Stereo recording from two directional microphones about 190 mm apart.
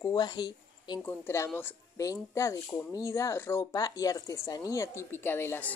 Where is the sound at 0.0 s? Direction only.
20° left (ahead or behind).